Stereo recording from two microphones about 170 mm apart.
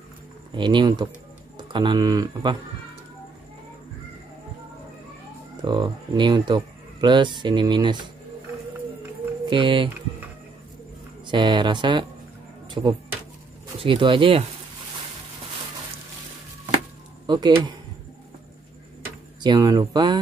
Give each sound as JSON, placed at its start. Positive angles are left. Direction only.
{"t": 0.6, "sound": "speech", "side_deg": -25}
{"t": 5.6, "sound": "speech", "side_deg": -25}
{"t": 9.5, "sound": "speech", "side_deg": -30}
{"t": 11.2, "sound": "speech", "side_deg": -25}
{"t": 12.6, "sound": "music", "side_deg": -25}
{"t": 13.7, "sound": "speech", "side_deg": -30}
{"t": 17.3, "sound": "speech", "side_deg": -25}
{"t": 19.4, "sound": "speech", "side_deg": -25}